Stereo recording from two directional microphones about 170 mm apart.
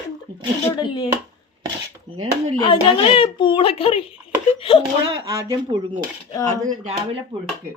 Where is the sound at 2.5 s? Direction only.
30° left (ahead or behind).